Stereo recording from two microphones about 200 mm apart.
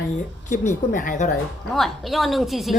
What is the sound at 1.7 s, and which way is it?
A woman's voice, centre (ahead or behind).